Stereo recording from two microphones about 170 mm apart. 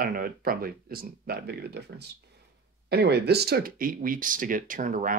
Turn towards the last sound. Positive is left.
turn(degrees=-50)  # may be behind; listen again after turning